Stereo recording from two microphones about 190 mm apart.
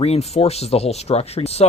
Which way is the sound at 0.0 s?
35° left (ahead or behind).